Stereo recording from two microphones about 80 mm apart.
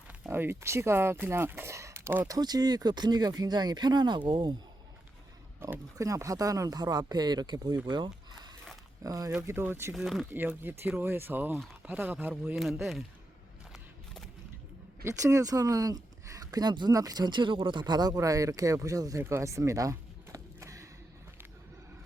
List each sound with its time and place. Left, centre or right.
0.3 s speech: right
2.2 s speech: right
5.6 s speech: right
6.0 s speech: right
7.9 s a sound: right
9.0 s speech: right
9.5 s speech: right
9.9 s speech: centre
10.6 s speech: right
13.7 s a sound: centre
15.0 s speech: right
16.9 s speech: right
19.2 s a sound: right